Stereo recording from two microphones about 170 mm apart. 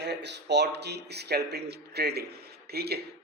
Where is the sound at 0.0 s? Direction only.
85° right.